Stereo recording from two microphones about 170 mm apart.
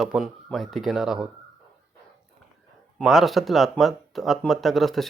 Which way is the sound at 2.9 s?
Centre (ahead or behind).